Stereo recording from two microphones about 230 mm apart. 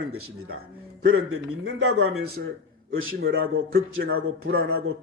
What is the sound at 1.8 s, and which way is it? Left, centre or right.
Speech, right.